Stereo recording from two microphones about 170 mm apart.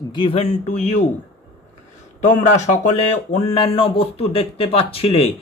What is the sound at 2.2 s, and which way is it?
Speech, 45° left (ahead or behind).